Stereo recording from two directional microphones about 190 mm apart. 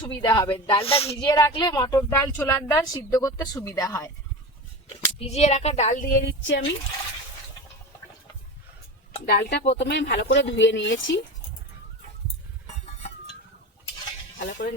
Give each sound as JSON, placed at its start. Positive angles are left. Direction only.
{"t": 0.0, "sound": "speech", "side_deg": 25}
{"t": 4.9, "sound": "speech", "side_deg": 35}
{"t": 9.2, "sound": "speech", "side_deg": 60}